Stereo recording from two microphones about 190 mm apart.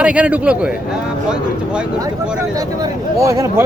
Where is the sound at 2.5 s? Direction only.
20° right (ahead or behind).